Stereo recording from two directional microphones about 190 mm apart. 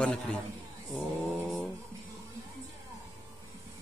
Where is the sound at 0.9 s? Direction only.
Centre (ahead or behind).